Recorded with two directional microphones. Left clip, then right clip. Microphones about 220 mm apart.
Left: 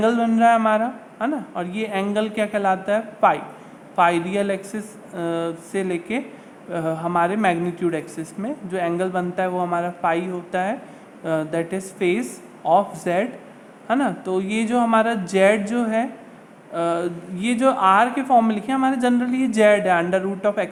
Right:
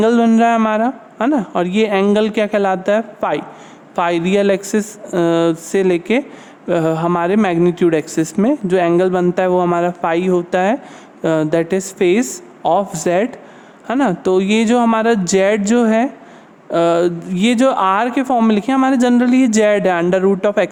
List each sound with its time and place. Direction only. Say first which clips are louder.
0.0 s speech: right 4 dB; 45° right (ahead or behind)